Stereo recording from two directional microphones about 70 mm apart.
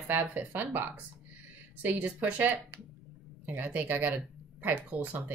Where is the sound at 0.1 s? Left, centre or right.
Right.